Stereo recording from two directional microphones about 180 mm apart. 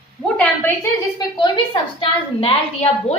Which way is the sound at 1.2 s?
25° left (ahead or behind).